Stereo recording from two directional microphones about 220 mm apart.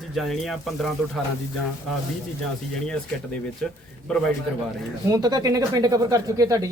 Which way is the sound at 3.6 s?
5° left (ahead or behind).